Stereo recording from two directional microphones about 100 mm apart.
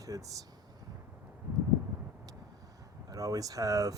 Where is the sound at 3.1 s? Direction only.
35° right (ahead or behind).